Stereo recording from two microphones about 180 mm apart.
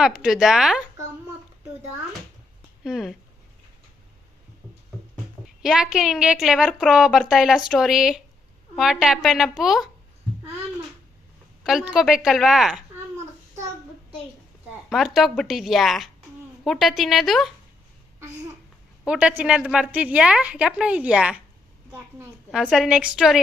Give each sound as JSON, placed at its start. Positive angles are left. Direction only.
{"t": 0.0, "sound": "a woman's voice", "side_deg": -5}
{"t": 2.8, "sound": "a woman's voice", "side_deg": 0}
{"t": 5.6, "sound": "a woman's voice", "side_deg": -5}
{"t": 11.6, "sound": "a woman's voice", "side_deg": 0}
{"t": 14.8, "sound": "a woman's voice", "side_deg": 0}
{"t": 19.0, "sound": "a woman's voice", "side_deg": -5}